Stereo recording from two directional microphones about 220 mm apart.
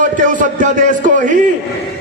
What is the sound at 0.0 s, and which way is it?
Speech, 35° right (ahead or behind).